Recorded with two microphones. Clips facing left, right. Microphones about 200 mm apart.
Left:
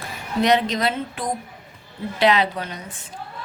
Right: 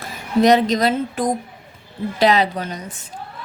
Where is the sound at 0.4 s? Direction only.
40° right (ahead or behind).